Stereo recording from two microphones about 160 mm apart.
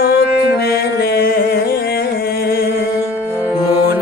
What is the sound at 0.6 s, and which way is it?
Mantra, 80° left.